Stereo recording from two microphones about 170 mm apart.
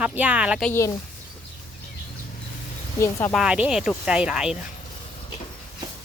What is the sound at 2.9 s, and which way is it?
Speech, 15° left (ahead or behind).